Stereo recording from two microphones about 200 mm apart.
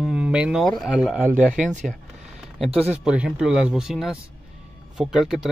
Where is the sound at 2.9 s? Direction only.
5° right (ahead or behind).